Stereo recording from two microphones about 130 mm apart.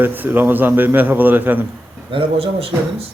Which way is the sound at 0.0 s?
15° right (ahead or behind).